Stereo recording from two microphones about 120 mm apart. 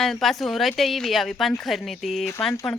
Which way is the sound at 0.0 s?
Centre (ahead or behind).